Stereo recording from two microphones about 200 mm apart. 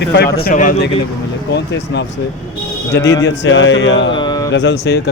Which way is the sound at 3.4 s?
65° left (ahead or behind).